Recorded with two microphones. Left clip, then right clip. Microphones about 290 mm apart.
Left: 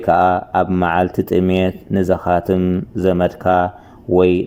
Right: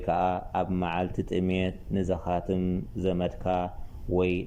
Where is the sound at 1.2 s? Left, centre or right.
Left.